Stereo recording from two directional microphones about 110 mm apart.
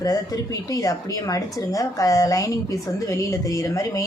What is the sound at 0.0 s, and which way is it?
Speech, 30° left (ahead or behind).